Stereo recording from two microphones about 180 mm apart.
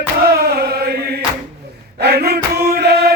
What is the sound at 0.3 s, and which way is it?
Chant, 60° right (ahead or behind).